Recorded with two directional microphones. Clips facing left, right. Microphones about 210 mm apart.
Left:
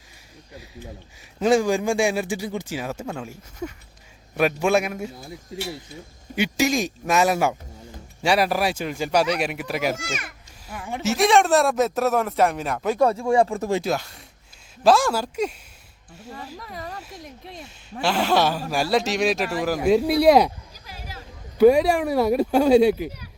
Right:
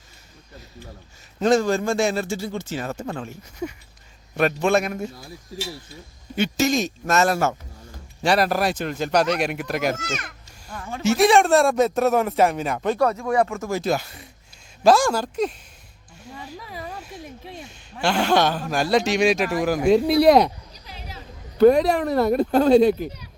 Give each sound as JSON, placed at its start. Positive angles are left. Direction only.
{"t": 1.4, "sound": "speech", "side_deg": 10}
{"t": 3.6, "sound": "a sound", "side_deg": -10}
{"t": 4.4, "sound": "speech", "side_deg": 10}
{"t": 5.1, "sound": "speech", "side_deg": 25}
{"t": 6.3, "sound": "speech", "side_deg": 10}
{"t": 11.0, "sound": "speech", "side_deg": 0}
{"t": 13.0, "sound": "speech", "side_deg": 30}
{"t": 13.8, "sound": "speech", "side_deg": 0}